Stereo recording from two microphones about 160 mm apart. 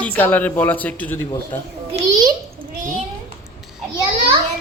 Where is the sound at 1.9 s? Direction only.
40° right (ahead or behind).